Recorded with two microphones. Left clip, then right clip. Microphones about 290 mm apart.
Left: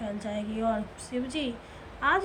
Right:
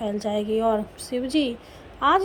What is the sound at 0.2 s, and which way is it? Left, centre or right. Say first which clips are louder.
A woman's voice: right 12 dB; centre.